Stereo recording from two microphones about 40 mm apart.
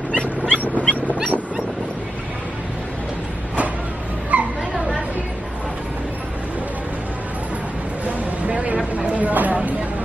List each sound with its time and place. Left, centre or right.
0.1 s dog: left
1.0 s fowl: right
4.3 s dog: right
4.7 s chatter: centre
8.5 s a sound: right
9.6 s vehicle: right